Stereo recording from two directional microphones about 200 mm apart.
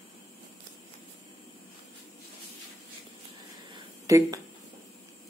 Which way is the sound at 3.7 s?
15° right (ahead or behind).